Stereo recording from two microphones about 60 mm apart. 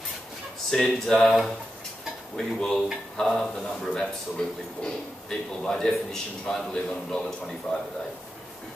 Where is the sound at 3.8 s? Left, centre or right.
Centre.